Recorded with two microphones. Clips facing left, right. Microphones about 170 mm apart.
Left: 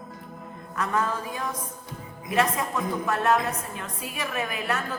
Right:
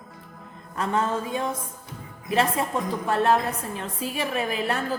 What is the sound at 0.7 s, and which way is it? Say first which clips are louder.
A woman's voice: right 2 dB; 30° right (ahead or behind).